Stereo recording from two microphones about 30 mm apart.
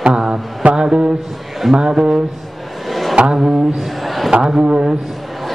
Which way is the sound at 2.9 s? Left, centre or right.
Centre.